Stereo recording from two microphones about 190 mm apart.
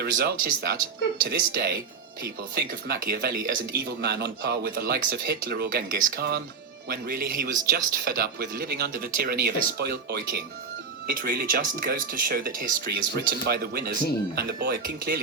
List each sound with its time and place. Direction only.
0.0 s speech: 55° right (ahead or behind)